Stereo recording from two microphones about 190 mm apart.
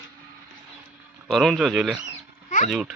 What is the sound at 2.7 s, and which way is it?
Speech, centre (ahead or behind).